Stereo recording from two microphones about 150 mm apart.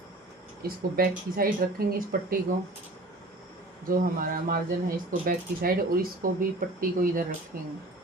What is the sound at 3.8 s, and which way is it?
Speech, 70° right (ahead or behind).